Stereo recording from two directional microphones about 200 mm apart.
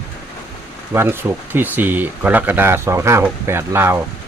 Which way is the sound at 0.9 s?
10° right (ahead or behind).